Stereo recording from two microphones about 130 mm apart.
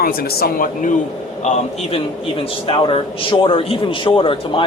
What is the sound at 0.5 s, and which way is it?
Speech, 90° left.